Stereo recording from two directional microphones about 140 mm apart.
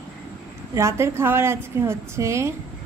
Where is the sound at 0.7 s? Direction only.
20° right (ahead or behind).